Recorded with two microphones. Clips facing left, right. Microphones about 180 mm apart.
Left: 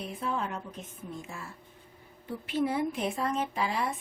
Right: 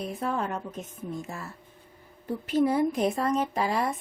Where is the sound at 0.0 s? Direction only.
45° right (ahead or behind).